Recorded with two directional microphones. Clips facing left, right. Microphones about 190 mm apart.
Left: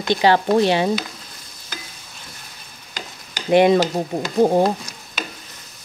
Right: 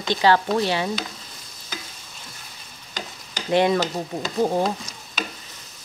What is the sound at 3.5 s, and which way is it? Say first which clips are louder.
Speech: left 5 dB; 20° left (ahead or behind).